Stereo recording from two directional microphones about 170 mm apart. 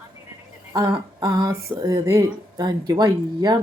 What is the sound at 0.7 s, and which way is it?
Speech, 20° right (ahead or behind).